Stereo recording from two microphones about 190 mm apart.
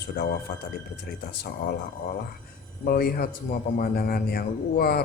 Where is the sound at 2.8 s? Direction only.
50° left (ahead or behind).